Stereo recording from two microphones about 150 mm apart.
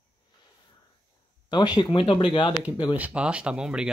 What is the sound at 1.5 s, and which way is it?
Speech, 30° left (ahead or behind).